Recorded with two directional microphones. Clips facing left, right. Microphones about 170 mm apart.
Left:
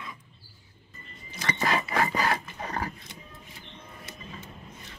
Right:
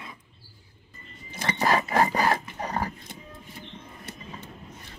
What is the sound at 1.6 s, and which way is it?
Wood, 40° right (ahead or behind).